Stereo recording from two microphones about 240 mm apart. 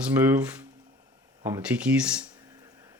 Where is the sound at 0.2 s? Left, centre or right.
Centre.